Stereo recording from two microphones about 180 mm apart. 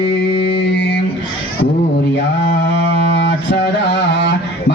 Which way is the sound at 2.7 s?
75° left (ahead or behind).